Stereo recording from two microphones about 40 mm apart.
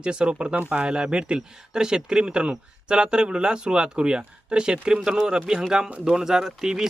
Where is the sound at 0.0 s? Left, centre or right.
Right.